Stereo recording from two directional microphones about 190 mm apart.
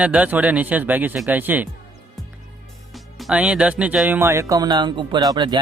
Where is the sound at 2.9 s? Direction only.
Centre (ahead or behind); by 5.5 s 20° right (ahead or behind).